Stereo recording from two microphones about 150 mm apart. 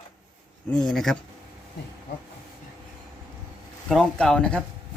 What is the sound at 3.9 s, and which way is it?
Speech, 5° left (ahead or behind).